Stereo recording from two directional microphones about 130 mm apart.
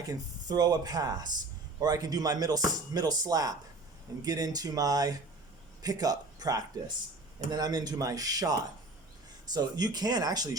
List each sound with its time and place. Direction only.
0.1 s speech: 30° right (ahead or behind)